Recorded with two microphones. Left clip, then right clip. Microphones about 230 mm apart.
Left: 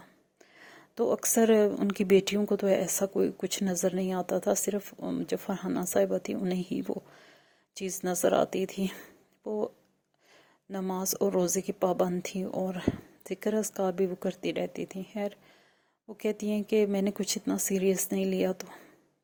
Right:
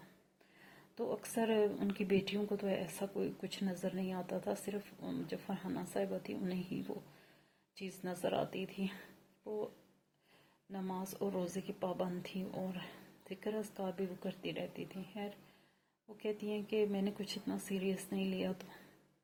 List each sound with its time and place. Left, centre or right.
0.6 s speech: left
9.4 s a sound: left
10.7 s speech: left